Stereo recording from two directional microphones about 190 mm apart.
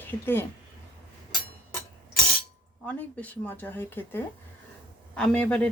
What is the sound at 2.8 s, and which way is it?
Speech, 5° left (ahead or behind).